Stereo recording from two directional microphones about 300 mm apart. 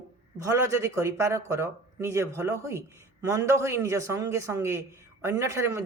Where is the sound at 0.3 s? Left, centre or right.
Centre.